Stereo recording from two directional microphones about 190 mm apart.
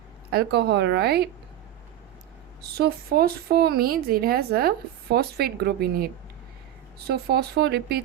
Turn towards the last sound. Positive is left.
turn(degrees=-60)  # may be behind; listen again after turning